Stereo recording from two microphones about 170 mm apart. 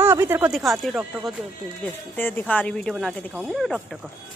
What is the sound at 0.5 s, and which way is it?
Speech, centre (ahead or behind).